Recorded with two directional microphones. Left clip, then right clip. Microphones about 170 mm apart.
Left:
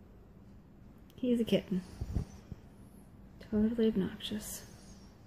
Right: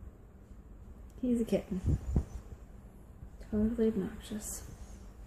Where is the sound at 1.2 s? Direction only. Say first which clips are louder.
Left 1 dB; 50° left (ahead or behind).